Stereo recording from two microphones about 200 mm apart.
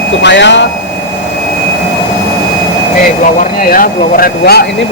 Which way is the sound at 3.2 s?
45° left (ahead or behind).